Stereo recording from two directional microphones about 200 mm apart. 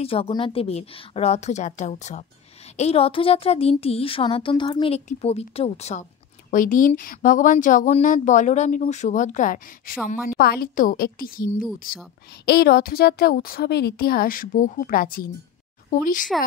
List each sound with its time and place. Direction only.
0.0 s a woman's voice: 30° left (ahead or behind); by 11.4 s 45° left (ahead or behind)
12.4 s a woman's voice: 50° left (ahead or behind)